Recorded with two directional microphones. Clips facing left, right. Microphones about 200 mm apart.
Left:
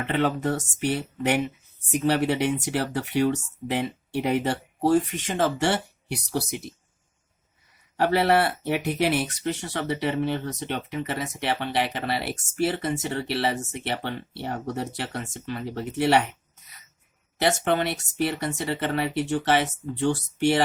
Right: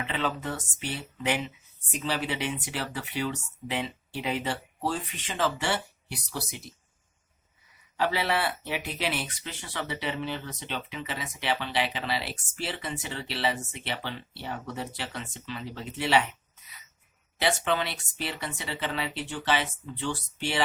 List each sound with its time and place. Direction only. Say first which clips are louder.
0.0 s speech: left 7 dB; 60° left (ahead or behind)
7.9 s speech: left 7 dB; 60° left (ahead or behind)
17.4 s speech: left 4 dB; 55° left (ahead or behind)